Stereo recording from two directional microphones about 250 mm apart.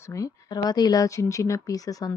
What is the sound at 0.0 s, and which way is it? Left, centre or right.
Speech, centre.